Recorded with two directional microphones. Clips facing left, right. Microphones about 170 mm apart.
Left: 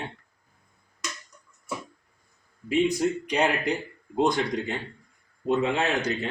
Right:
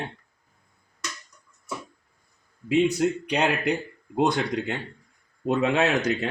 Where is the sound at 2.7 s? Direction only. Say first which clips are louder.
Right 2 dB; 65° right (ahead or behind).